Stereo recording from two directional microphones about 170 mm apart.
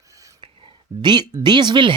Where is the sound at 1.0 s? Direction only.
25° right (ahead or behind).